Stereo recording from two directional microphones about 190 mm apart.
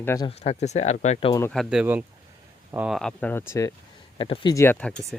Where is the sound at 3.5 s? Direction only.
15° left (ahead or behind).